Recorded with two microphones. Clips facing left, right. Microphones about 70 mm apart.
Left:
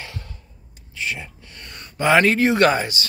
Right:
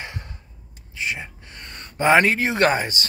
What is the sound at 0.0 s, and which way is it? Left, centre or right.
Gasp, right.